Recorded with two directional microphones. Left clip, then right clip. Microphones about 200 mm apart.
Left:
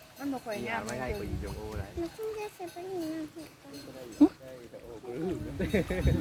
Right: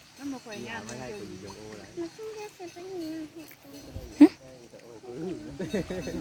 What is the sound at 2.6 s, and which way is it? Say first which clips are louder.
Speech: left 1 dB; 20° right (ahead or behind).